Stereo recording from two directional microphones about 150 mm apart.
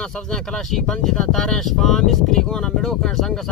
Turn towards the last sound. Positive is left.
turn(degrees=0)  # may be behind; listen again after turning